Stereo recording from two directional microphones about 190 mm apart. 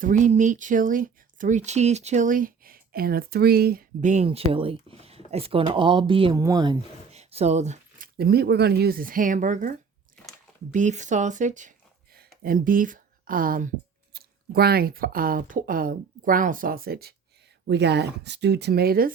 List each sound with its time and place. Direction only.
0.0 s speech: 40° right (ahead or behind); by 6.7 s 20° right (ahead or behind)
7.1 s speech: 35° right (ahead or behind)
10.2 s a sound: 5° left (ahead or behind)
10.7 s speech: 40° right (ahead or behind)